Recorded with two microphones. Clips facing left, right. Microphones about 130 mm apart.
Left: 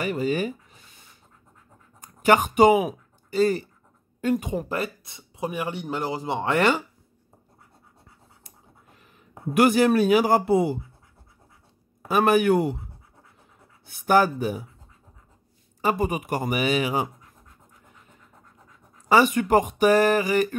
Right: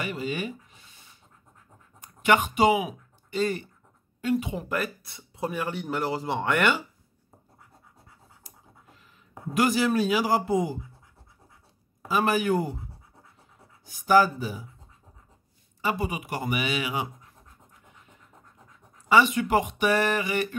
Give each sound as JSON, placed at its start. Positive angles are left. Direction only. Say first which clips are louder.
{"t": 0.0, "sound": "speech", "louder": "left 6 dB", "side_deg": 40}
{"t": 2.0, "sound": "speech", "louder": "left 3 dB", "side_deg": 40}
{"t": 4.6, "sound": "speech", "louder": "left 1 dB", "side_deg": 25}
{"t": 9.5, "sound": "a man's voice", "louder": "left 5 dB", "side_deg": 60}
{"t": 12.1, "sound": "a man's voice", "louder": "left 5 dB", "side_deg": 60}
{"t": 13.8, "sound": "a man's voice", "louder": "left 1 dB", "side_deg": 60}
{"t": 15.8, "sound": "speech", "louder": "left 5 dB", "side_deg": 45}
{"t": 19.0, "sound": "speech", "louder": "left 2 dB", "side_deg": 45}